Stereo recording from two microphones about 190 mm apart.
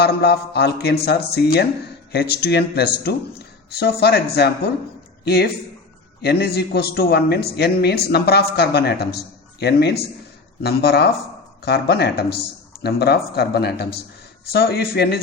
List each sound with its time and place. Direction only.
0.0 s a man's voice: 60° left (ahead or behind)